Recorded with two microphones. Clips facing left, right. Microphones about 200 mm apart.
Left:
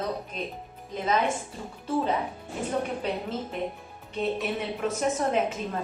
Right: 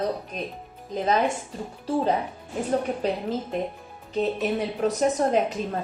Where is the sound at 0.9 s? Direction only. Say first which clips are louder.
Right 3 dB; 35° right (ahead or behind).